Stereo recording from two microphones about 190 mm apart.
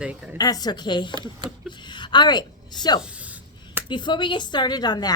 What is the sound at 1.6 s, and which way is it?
Speech, 25° left (ahead or behind).